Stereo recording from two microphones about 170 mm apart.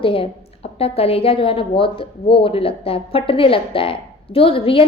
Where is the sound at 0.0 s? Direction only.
35° left (ahead or behind).